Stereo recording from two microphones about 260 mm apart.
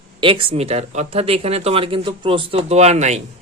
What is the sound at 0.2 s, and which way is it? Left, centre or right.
Speech, centre.